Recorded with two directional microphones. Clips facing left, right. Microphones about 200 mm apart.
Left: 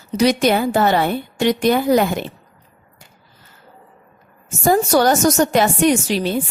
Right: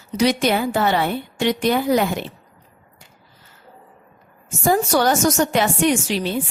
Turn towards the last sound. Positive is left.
turn(degrees=40)  # may be behind; listen again after turning